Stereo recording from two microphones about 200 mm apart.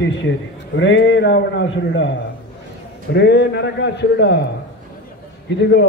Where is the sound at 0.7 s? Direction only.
65° left (ahead or behind).